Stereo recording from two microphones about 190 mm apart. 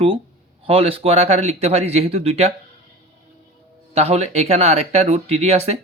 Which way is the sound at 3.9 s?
35° right (ahead or behind).